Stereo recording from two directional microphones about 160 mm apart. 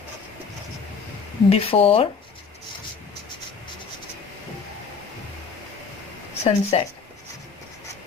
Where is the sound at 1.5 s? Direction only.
35° left (ahead or behind).